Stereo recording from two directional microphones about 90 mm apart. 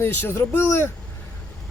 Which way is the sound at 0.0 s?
25° left (ahead or behind).